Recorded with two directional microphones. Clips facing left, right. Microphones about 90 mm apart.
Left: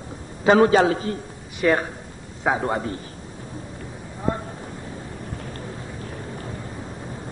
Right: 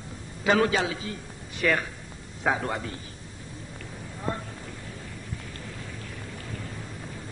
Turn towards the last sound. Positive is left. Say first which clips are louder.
# left 5 dB
turn(degrees=25)  # may be behind; listen again after turning